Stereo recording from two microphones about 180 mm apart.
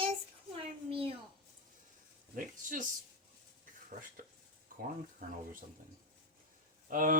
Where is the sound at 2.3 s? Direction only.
45° right (ahead or behind).